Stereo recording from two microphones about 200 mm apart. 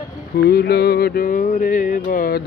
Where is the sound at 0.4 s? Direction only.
50° left (ahead or behind).